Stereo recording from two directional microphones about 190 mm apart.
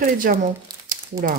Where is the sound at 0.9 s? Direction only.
45° right (ahead or behind).